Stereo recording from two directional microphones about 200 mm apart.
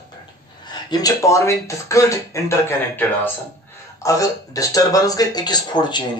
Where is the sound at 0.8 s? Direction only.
20° left (ahead or behind).